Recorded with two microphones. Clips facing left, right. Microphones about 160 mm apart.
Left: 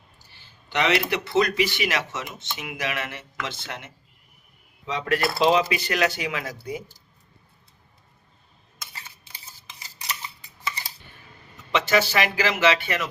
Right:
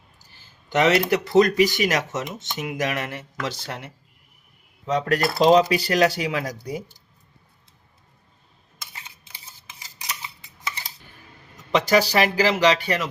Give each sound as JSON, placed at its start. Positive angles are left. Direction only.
{"t": 0.7, "sound": "speech", "side_deg": -45}
{"t": 11.7, "sound": "speech", "side_deg": -40}